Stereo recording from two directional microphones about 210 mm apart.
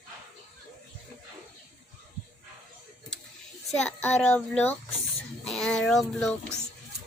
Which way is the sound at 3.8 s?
5° left (ahead or behind).